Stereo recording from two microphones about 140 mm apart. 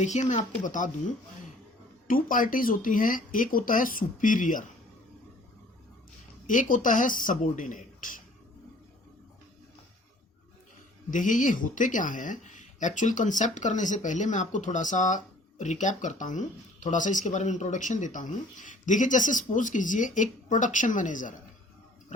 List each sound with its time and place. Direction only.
0.0 s speech: 60° left (ahead or behind)
2.0 s speech: 75° left (ahead or behind)
6.5 s speech: 70° left (ahead or behind)
11.1 s speech: 70° left (ahead or behind)